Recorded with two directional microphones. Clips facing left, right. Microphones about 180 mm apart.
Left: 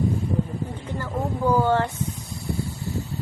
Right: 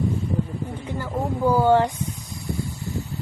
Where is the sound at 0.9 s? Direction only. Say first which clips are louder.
Right 1 dB; 10° right (ahead or behind).